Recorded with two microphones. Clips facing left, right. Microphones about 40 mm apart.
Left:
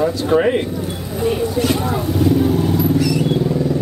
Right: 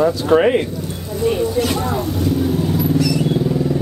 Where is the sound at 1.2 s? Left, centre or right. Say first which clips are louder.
Even; centre.